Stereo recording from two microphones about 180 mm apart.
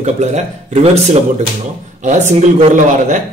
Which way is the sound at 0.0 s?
40° right (ahead or behind).